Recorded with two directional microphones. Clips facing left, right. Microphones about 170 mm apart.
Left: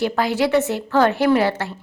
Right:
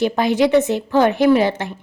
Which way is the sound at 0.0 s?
20° right (ahead or behind).